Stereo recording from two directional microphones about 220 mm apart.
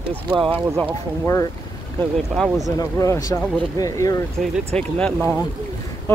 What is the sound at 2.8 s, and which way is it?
Speech, 15° left (ahead or behind).